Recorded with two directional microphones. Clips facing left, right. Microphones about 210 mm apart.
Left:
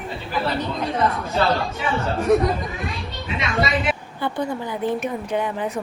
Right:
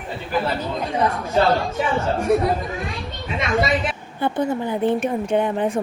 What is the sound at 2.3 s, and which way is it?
Speech, 5° right (ahead or behind).